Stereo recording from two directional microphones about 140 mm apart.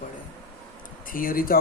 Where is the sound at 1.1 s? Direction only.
85° left.